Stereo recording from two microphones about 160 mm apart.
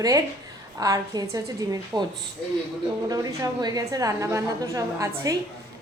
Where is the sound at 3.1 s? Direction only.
20° right (ahead or behind).